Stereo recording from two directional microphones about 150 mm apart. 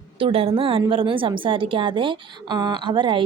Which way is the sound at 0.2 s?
40° right (ahead or behind).